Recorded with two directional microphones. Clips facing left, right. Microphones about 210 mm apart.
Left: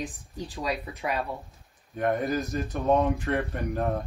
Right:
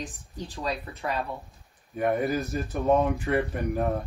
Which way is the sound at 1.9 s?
5° right (ahead or behind).